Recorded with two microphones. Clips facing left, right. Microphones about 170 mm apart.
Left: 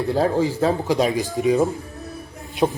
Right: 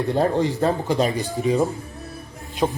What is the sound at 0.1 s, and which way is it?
A man's voice, 5° left (ahead or behind).